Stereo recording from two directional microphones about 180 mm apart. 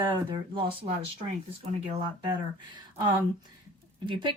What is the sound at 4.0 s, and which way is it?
Speech, 25° right (ahead or behind).